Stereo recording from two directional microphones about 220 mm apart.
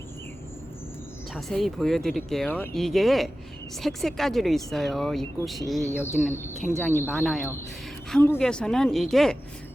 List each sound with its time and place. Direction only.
1.3 s speech: centre (ahead or behind)
6.0 s speech: 10° left (ahead or behind)